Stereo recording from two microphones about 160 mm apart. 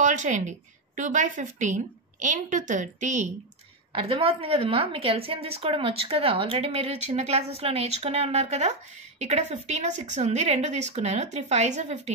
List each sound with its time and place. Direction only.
0.0 s a woman's voice: 50° right (ahead or behind)
3.9 s a woman's voice: 35° right (ahead or behind)